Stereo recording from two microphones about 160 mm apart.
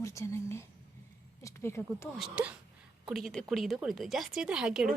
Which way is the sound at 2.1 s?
5° right (ahead or behind).